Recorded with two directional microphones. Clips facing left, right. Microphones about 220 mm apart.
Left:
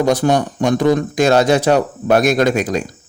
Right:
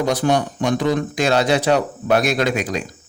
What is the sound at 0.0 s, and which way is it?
A man's voice, 45° left (ahead or behind).